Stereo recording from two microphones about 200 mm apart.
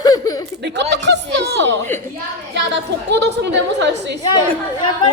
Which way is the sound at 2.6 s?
60° right (ahead or behind).